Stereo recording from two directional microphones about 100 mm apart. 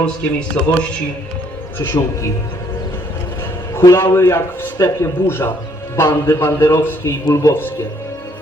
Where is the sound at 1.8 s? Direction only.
30° left (ahead or behind).